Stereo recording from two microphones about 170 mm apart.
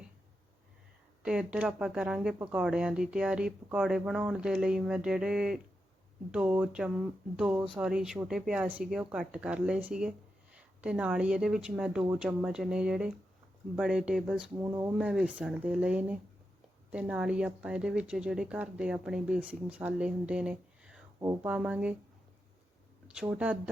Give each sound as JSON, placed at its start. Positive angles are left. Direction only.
{"t": 1.2, "sound": "speech", "side_deg": -5}
{"t": 14.6, "sound": "speech", "side_deg": -15}
{"t": 14.9, "sound": "speech", "side_deg": -5}
{"t": 23.0, "sound": "speech", "side_deg": -5}